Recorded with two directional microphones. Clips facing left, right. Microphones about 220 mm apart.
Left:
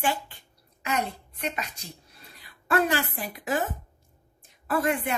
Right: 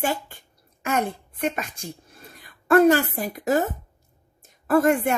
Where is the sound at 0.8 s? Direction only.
50° right (ahead or behind).